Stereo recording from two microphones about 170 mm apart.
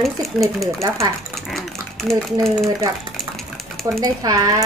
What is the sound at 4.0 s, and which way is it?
Speech, 20° right (ahead or behind).